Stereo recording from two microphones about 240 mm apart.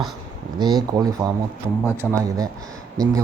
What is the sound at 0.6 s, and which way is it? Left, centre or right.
Speech, centre.